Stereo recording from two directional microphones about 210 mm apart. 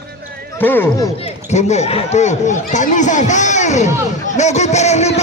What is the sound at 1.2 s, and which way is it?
Speech, 30° left (ahead or behind).